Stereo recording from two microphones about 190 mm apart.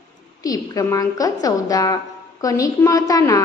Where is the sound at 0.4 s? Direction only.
20° left (ahead or behind).